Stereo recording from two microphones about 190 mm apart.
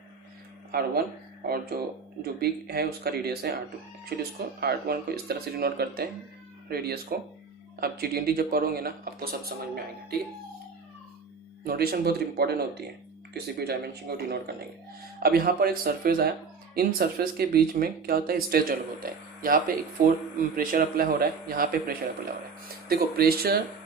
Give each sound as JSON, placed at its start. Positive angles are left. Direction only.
{"t": 0.7, "sound": "speech", "side_deg": -50}
{"t": 11.6, "sound": "speech", "side_deg": -55}